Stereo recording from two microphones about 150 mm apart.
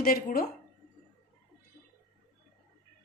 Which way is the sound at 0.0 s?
75° left (ahead or behind).